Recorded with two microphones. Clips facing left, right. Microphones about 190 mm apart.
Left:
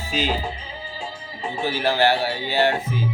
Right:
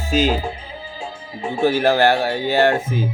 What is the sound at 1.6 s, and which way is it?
Speech, 50° right (ahead or behind).